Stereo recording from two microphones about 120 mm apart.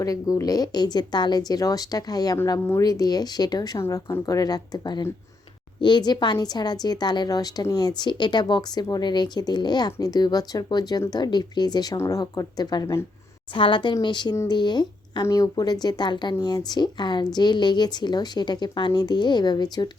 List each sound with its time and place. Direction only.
0.0 s speech: 30° left (ahead or behind)
13.5 s a woman's voice: 45° left (ahead or behind)